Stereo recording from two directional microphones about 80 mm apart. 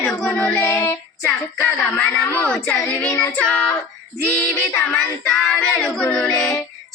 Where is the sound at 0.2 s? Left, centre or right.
Centre.